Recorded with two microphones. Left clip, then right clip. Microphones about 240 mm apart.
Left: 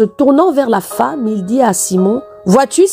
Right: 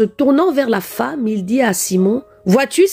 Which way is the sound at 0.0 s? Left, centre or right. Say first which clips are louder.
Left 4 dB; centre.